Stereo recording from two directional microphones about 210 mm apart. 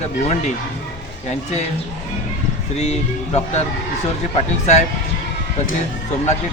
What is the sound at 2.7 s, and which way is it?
Speech, 30° left (ahead or behind).